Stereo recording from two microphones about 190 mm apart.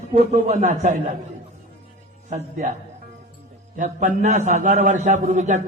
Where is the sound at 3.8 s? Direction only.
40° right (ahead or behind).